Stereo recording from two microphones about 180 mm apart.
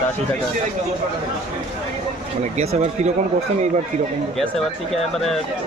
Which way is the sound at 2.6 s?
40° right (ahead or behind).